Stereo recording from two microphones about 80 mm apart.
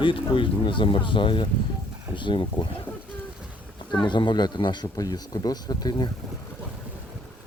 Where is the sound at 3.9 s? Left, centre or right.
Left.